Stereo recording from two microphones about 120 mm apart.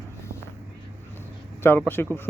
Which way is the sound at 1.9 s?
20° left (ahead or behind).